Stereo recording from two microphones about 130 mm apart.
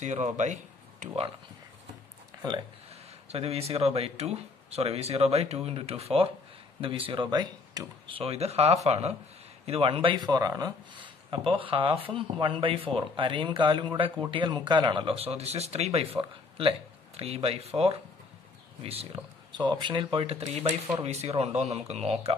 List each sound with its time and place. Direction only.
0.0 s speech: 65° right (ahead or behind)
3.3 s speech: 50° right (ahead or behind); by 7.8 s 30° right (ahead or behind)
8.1 s speech: 50° right (ahead or behind); by 10.7 s 25° right (ahead or behind)
11.0 s speech: 40° right (ahead or behind)
19.5 s speech: 35° right (ahead or behind); by 22.3 s 55° right (ahead or behind)